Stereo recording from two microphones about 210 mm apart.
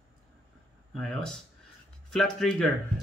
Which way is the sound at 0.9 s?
Centre (ahead or behind).